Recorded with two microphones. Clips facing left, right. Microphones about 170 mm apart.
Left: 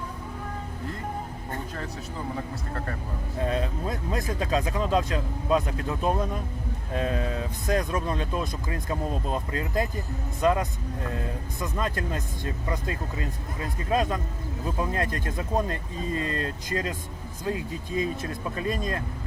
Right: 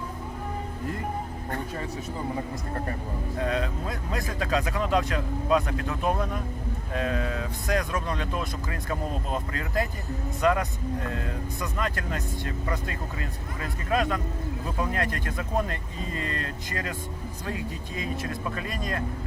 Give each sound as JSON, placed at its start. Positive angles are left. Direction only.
{"t": 2.3, "sound": "speech", "side_deg": -15}
{"t": 3.4, "sound": "speech", "side_deg": 20}